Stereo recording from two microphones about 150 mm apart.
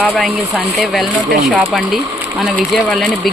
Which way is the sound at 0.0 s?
Centre (ahead or behind).